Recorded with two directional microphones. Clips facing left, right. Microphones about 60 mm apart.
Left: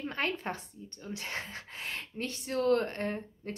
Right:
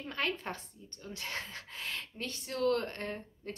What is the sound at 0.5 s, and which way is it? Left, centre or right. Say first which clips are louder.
Speech: left 4 dB; left.